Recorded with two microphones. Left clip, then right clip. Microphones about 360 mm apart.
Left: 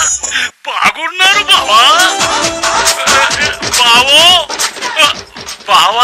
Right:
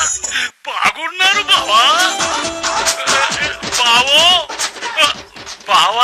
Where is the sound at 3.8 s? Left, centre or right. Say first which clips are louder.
Left 4 dB; left.